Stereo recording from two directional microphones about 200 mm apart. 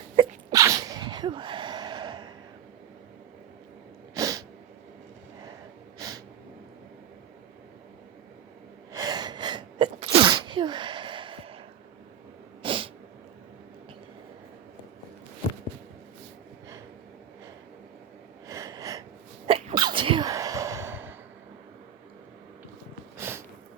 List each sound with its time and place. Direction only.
0.2 s sneeze: 15° right (ahead or behind)
4.1 s sneeze: 15° right (ahead or behind)
6.0 s snort: 15° right (ahead or behind)
8.9 s sneeze: 20° right (ahead or behind)
12.6 s sneeze: 25° right (ahead or behind)
18.4 s sneeze: 15° right (ahead or behind)
19.5 s sneeze: 30° right (ahead or behind); by 21.2 s 10° right (ahead or behind)
23.1 s a sound: 10° right (ahead or behind)